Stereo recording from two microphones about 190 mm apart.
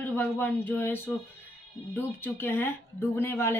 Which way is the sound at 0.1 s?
10° left (ahead or behind).